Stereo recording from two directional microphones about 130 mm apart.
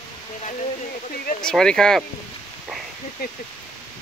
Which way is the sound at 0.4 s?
65° left (ahead or behind).